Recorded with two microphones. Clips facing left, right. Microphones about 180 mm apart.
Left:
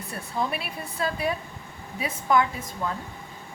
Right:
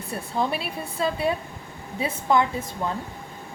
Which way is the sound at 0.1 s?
30° right (ahead or behind).